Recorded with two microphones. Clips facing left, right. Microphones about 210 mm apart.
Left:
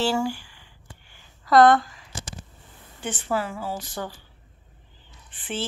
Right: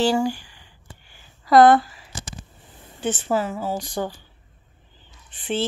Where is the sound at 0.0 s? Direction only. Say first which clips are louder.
Right 4 dB; 20° right (ahead or behind).